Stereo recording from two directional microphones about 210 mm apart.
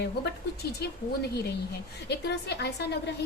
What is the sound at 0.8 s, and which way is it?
Speech, 50° left (ahead or behind).